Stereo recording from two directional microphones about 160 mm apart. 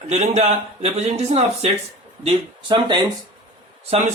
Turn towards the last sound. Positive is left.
turn(degrees=-40)  # may be behind; listen again after turning